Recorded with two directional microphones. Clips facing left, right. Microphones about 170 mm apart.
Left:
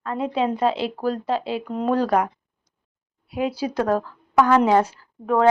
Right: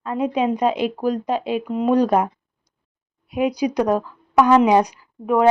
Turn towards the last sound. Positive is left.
turn(degrees=-15)  # may be behind; listen again after turning